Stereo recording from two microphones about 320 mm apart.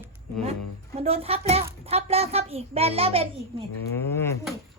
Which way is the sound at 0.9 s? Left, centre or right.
Centre.